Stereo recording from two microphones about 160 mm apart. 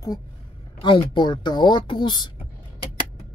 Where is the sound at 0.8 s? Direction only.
30° left (ahead or behind).